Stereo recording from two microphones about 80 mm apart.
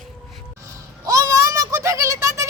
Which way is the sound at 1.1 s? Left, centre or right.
Right.